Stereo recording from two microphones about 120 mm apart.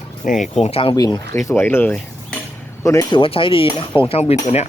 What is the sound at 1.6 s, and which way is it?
Speech, 15° left (ahead or behind).